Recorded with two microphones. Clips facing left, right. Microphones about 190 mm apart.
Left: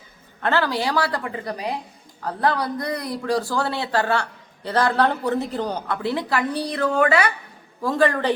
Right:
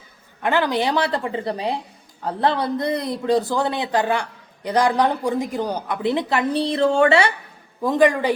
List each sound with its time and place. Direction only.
0.4 s a man's voice: 15° right (ahead or behind)